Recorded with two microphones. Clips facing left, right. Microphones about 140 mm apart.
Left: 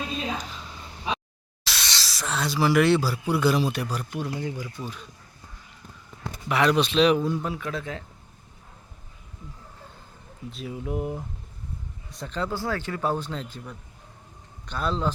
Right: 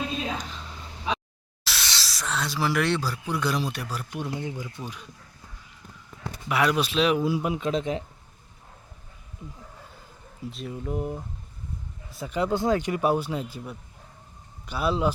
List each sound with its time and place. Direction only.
1.6 s speech: centre (ahead or behind)
4.1 s speech: 20° right (ahead or behind)
6.5 s speech: 5° right (ahead or behind)
10.5 s speech: centre (ahead or behind)
12.1 s speech: 10° right (ahead or behind)